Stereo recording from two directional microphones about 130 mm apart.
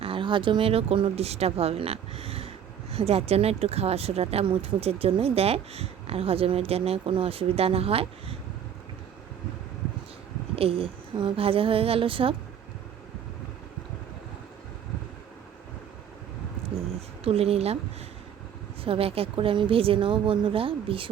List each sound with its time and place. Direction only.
0.0 s speech: 40° right (ahead or behind)
10.5 s speech: 45° right (ahead or behind)
17.2 s speech: 50° right (ahead or behind)
18.9 s speech: 45° right (ahead or behind)